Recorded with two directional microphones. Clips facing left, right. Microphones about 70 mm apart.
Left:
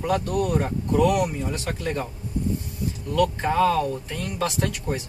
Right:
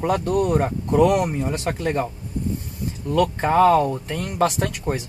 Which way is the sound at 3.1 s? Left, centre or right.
Right.